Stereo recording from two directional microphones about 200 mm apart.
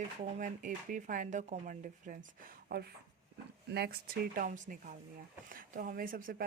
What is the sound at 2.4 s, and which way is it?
Speech, 50° right (ahead or behind).